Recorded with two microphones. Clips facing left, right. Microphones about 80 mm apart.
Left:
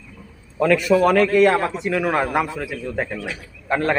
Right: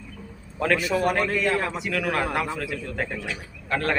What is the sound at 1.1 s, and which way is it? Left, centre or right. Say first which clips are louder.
Speech: left 9 dB; left.